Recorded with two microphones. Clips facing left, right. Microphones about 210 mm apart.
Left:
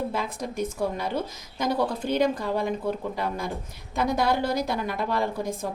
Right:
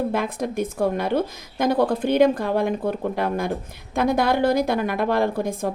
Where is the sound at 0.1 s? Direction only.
55° right (ahead or behind).